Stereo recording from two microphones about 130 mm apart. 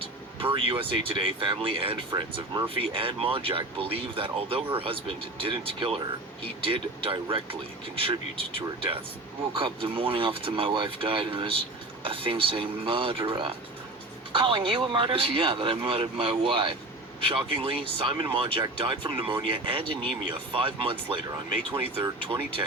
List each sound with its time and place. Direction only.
0.0 s speech: 45° right (ahead or behind)